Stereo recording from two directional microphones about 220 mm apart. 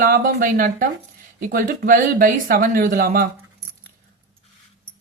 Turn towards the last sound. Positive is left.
turn(degrees=-40)  # may be behind; listen again after turning